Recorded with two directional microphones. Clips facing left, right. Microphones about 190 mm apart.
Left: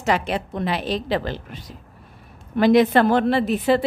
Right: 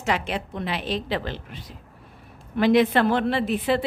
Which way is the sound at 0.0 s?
40° left (ahead or behind).